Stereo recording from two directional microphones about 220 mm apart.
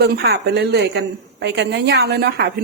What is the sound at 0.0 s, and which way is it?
A woman's voice, 50° right (ahead or behind).